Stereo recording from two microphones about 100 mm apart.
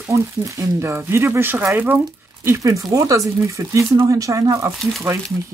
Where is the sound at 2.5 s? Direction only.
35° right (ahead or behind).